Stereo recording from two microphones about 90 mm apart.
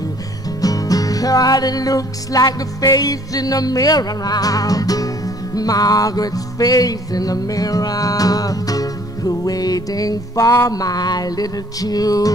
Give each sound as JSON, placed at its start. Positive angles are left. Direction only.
{"t": 0.6, "sound": "music", "side_deg": 40}